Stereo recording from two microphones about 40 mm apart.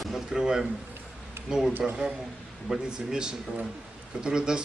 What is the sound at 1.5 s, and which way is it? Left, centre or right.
Speech, centre.